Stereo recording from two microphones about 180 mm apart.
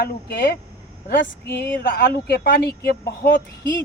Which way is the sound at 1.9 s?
60° left (ahead or behind).